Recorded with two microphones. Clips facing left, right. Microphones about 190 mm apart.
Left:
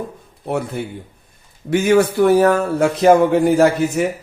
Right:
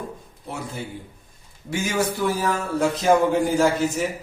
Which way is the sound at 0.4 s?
60° left (ahead or behind).